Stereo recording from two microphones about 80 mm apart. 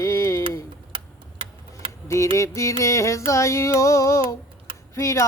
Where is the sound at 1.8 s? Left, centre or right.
Right.